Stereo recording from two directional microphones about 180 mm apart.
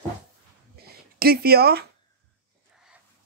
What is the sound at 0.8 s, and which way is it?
Speech, 60° right (ahead or behind).